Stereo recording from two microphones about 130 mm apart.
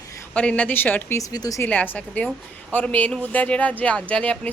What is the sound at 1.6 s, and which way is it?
Speech, 15° left (ahead or behind).